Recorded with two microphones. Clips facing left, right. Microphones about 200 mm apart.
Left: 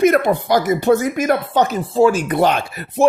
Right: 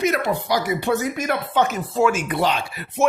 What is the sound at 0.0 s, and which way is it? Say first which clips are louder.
Speech: left 7 dB; 55° left (ahead or behind).